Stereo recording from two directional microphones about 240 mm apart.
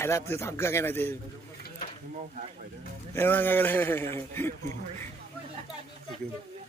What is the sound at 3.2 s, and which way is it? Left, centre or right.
A man's voice, centre.